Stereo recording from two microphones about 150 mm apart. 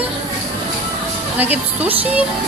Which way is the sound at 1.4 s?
10° right (ahead or behind).